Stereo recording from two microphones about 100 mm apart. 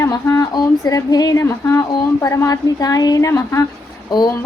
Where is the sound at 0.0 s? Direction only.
30° left (ahead or behind).